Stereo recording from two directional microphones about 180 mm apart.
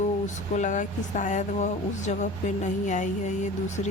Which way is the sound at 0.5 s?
45° left (ahead or behind).